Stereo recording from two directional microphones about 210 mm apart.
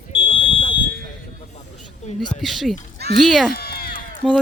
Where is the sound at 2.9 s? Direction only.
50° right (ahead or behind).